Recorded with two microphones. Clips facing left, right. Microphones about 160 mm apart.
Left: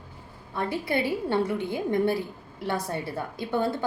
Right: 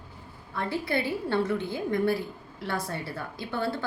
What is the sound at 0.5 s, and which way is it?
A woman's voice, 15° left (ahead or behind).